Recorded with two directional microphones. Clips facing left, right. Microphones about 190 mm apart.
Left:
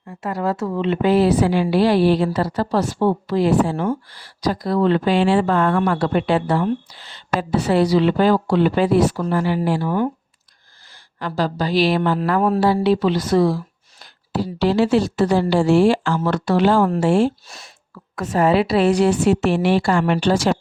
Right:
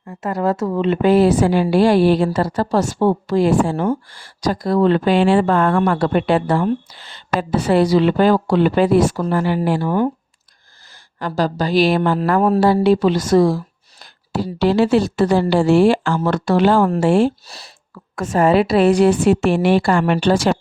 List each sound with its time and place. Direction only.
0.1 s a woman's voice: 45° right (ahead or behind)
11.2 s a woman's voice: 45° right (ahead or behind); by 17.3 s 65° right (ahead or behind)
17.4 s speech: 35° right (ahead or behind)
18.2 s a woman's voice: 45° right (ahead or behind)